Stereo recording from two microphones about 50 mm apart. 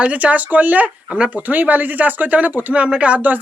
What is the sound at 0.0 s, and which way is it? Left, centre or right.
Speech, right.